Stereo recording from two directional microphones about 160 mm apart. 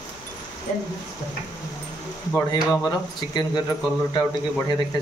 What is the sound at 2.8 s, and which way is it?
Speech, 25° left (ahead or behind).